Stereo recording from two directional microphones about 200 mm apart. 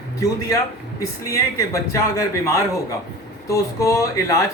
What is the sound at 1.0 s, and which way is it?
A man's voice, 15° left (ahead or behind).